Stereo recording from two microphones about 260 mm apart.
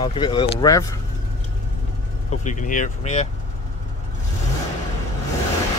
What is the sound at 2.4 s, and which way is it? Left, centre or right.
Speech, left.